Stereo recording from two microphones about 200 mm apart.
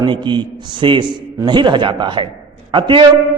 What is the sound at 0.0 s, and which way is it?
A man's voice, 20° right (ahead or behind).